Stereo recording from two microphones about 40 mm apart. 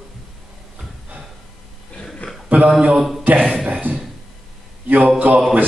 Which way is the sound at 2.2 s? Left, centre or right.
Left.